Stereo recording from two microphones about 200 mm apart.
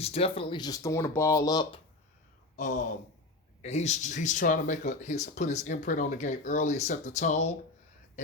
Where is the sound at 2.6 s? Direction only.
40° left (ahead or behind).